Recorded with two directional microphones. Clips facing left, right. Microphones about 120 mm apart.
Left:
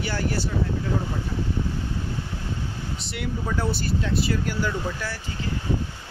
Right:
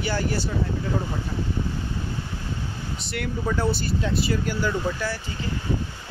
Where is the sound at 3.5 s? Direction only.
Centre (ahead or behind).